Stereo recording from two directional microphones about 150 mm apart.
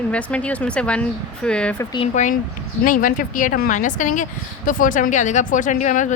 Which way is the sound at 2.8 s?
65° left (ahead or behind).